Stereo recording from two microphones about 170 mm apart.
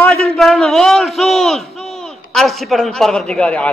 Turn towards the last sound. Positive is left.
turn(degrees=5)  # may be behind; listen again after turning